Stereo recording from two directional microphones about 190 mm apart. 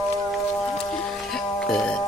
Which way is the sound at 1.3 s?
5° left (ahead or behind).